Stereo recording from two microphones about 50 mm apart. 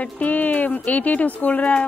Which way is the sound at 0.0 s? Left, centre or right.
Left.